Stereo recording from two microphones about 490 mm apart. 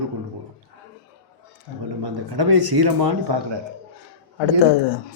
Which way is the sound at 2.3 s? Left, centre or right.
Right.